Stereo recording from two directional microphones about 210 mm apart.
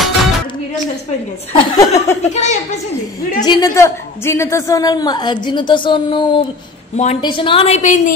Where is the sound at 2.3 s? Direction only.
35° left (ahead or behind).